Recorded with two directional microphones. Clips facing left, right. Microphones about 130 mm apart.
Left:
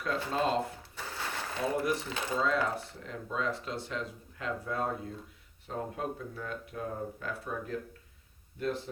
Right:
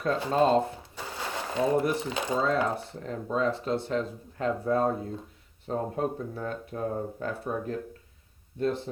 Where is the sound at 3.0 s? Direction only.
40° right (ahead or behind).